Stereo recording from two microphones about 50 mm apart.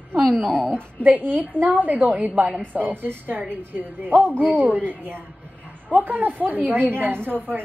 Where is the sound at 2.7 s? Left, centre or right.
Right.